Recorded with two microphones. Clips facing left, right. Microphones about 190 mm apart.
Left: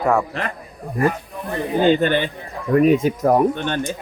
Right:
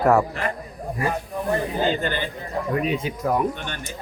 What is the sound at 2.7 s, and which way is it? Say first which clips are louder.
Speech: left 12 dB; 45° left (ahead or behind).